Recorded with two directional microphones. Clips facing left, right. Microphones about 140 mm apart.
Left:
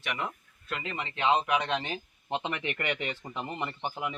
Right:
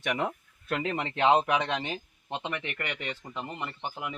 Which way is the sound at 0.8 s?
40° right (ahead or behind).